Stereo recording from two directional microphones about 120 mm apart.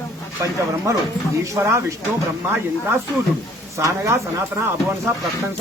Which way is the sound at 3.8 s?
25° right (ahead or behind).